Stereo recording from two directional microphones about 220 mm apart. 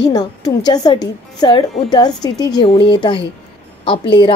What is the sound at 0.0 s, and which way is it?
A woman's voice, 15° left (ahead or behind).